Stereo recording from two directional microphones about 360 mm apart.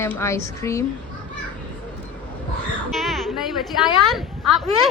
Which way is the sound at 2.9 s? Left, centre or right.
Centre.